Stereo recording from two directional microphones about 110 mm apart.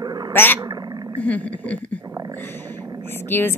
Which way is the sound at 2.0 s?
35° right (ahead or behind).